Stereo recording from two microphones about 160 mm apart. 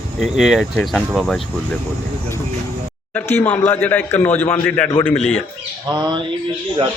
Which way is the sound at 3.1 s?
10° left (ahead or behind).